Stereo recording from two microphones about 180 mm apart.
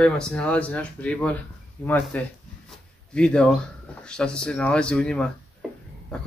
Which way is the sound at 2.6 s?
5° left (ahead or behind).